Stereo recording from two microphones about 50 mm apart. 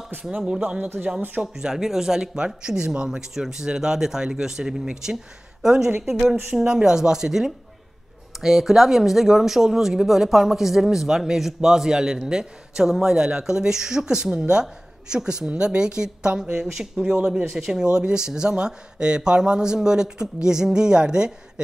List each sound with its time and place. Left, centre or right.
0.2 s speech: centre
0.6 s speech: right
1.4 s speech: centre
3.1 s a woman's voice: centre
6.5 s a woman's voice: centre
17.8 s speech: centre